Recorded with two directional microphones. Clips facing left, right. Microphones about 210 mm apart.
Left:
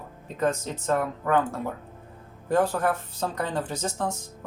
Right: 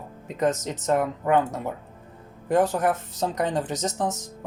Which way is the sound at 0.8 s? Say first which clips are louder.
Right 3 dB; 20° right (ahead or behind).